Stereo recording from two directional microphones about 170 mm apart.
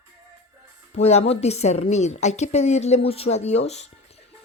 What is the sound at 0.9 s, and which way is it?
Speech, 40° left (ahead or behind).